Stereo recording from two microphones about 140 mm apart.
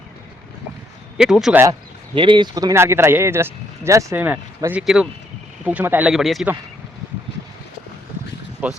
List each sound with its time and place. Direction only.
1.2 s speech: 5° right (ahead or behind)
2.1 s speech: 35° right (ahead or behind); by 6.1 s 10° right (ahead or behind)
6.1 s speech: centre (ahead or behind)
8.6 s speech: 10° right (ahead or behind)